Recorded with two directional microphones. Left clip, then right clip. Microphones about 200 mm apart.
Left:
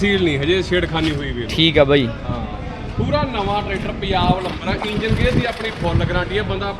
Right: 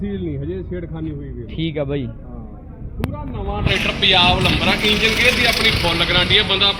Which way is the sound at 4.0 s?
10° right (ahead or behind).